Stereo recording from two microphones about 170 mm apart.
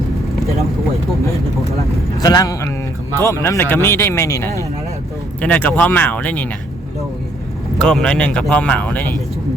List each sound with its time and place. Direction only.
2.1 s a man's voice: 20° left (ahead or behind)
7.8 s speech: 5° left (ahead or behind)